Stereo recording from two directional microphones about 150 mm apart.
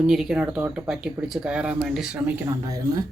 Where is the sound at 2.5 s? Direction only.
20° right (ahead or behind).